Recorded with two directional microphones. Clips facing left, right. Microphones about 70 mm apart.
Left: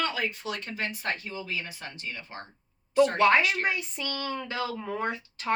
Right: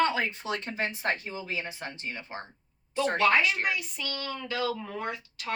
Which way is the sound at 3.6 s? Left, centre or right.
Left.